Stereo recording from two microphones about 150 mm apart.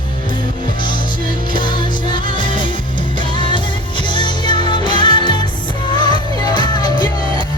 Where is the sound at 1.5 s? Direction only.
30° left (ahead or behind).